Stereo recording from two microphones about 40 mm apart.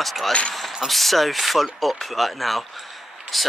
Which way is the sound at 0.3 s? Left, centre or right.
Left.